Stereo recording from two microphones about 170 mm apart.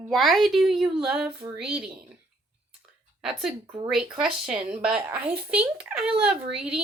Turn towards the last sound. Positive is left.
turn(degrees=-5)  # may be behind; listen again after turning